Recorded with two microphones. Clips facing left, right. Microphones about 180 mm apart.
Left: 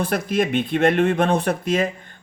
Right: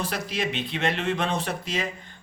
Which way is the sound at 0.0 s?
50° left (ahead or behind).